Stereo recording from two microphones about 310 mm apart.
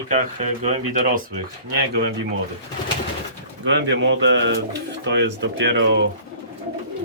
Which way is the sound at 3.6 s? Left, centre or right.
Right.